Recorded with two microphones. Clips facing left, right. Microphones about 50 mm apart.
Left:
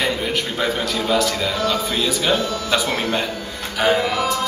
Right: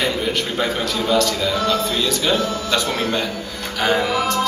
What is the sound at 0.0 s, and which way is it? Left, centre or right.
Speech, centre.